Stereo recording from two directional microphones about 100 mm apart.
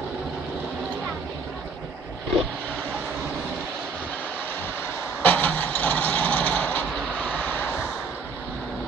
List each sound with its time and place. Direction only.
5.2 s vehicle: 15° left (ahead or behind)